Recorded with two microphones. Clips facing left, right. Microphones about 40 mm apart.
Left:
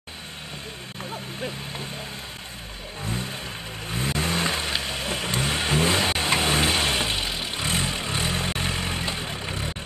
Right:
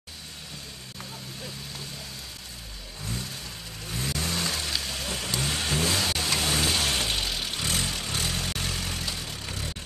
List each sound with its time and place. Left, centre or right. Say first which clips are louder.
3.1 s vehicle: left 5 dB; left